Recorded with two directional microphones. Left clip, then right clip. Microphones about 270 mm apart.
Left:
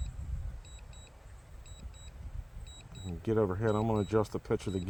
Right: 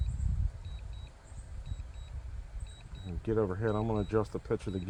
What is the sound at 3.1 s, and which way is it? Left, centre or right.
Speech, left.